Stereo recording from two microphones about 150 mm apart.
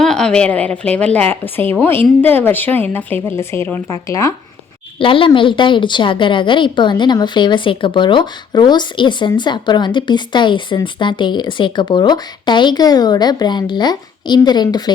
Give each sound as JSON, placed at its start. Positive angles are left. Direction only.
{"t": 0.0, "sound": "a woman's voice", "side_deg": 5}
{"t": 4.9, "sound": "a woman's voice", "side_deg": 35}